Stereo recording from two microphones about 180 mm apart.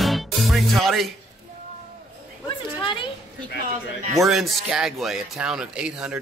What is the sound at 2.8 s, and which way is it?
Speech, 25° left (ahead or behind).